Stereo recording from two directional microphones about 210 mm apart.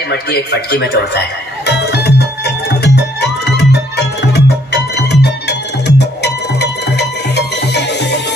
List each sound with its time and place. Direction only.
0.1 s speech: 50° left (ahead or behind)
1.7 s music: 50° left (ahead or behind)